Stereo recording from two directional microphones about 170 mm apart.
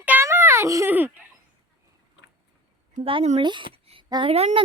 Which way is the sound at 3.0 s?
35° right (ahead or behind).